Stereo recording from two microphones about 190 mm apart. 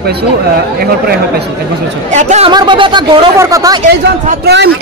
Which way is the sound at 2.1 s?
35° right (ahead or behind).